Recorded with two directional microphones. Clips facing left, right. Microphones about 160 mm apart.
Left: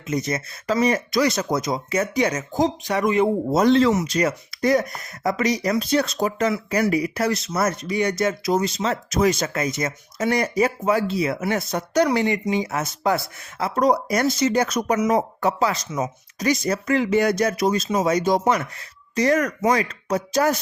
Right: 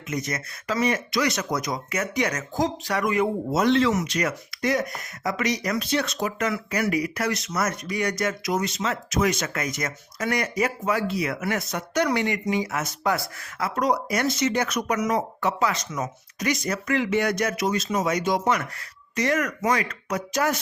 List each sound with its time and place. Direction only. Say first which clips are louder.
0.1 s speech: left 5 dB; 30° left (ahead or behind)
3.5 s speech: left 4 dB; 35° left (ahead or behind)